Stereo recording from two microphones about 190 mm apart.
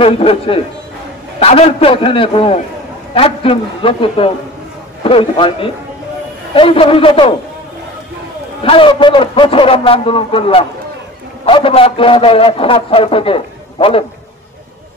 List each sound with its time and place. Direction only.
0.0 s a man's voice: 30° left (ahead or behind)
8.6 s a man's voice: 25° left (ahead or behind)